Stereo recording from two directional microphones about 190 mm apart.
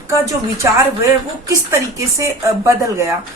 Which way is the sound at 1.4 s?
15° right (ahead or behind).